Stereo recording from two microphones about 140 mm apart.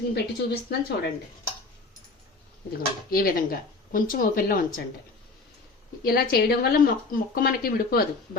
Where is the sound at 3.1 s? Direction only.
90° left.